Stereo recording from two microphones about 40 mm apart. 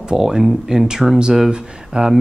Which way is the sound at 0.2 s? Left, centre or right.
Centre.